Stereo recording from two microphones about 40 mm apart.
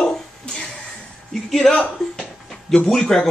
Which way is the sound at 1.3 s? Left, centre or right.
Centre.